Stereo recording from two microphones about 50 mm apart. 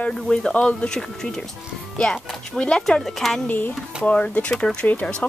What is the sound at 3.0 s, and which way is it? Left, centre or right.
Speech, centre.